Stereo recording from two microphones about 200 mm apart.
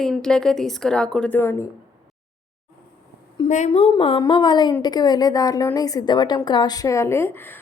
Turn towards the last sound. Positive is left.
turn(degrees=10)  # may be behind; listen again after turning